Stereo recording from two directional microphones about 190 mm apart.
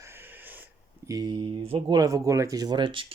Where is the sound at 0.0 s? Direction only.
10° right (ahead or behind).